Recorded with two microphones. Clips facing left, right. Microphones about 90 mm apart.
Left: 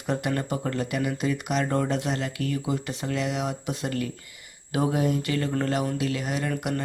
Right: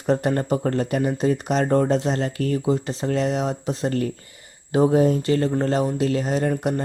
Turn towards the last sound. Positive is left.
turn(degrees=-35)  # may be behind; listen again after turning